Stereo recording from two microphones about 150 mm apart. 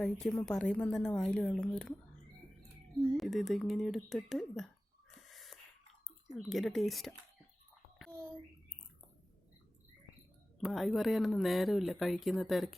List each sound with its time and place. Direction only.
0.0 s speech: 5° left (ahead or behind)
3.2 s speech: centre (ahead or behind)
5.1 s a sound: centre (ahead or behind)
6.3 s speech: centre (ahead or behind)
7.9 s a sound: centre (ahead or behind)
10.6 s speech: centre (ahead or behind)